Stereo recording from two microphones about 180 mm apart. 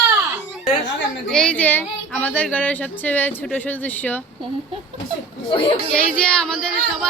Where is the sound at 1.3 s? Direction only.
5° left (ahead or behind).